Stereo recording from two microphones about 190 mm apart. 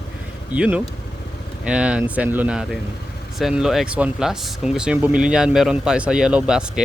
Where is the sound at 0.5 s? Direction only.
5° right (ahead or behind).